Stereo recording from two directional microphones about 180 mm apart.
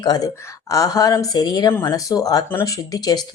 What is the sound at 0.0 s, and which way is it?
Speech, 20° left (ahead or behind).